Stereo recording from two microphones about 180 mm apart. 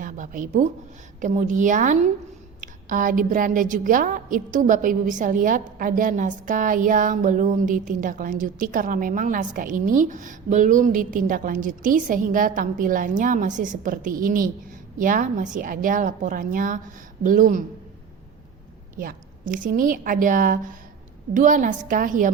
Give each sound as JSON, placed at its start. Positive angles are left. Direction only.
{"t": 0.0, "sound": "a sound", "side_deg": -50}
{"t": 1.2, "sound": "a woman's voice", "side_deg": -45}
{"t": 18.9, "sound": "a woman's voice", "side_deg": -50}